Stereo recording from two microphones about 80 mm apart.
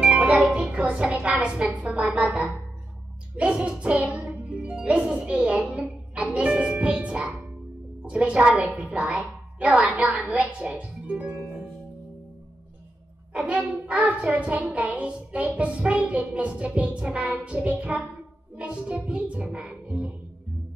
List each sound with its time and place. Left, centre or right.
0.0 s music: centre
1.9 s a child's voice: centre
4.1 s music: centre
8.0 s a woman's voice: centre
13.3 s a child's voice: centre